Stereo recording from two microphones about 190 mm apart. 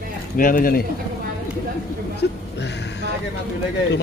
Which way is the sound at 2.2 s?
60° left (ahead or behind).